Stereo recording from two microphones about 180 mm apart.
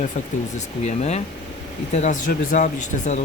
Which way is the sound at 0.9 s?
40° left (ahead or behind).